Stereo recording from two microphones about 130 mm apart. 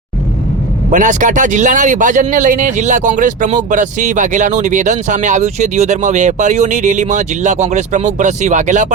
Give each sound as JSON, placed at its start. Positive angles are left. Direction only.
{"t": 0.9, "sound": "speech", "side_deg": -75}